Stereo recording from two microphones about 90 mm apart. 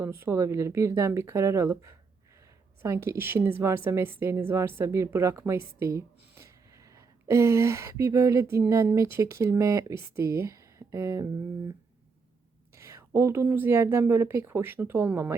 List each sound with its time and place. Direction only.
0.0 s a woman's voice: 30° right (ahead or behind)
12.7 s a woman's voice: 35° right (ahead or behind)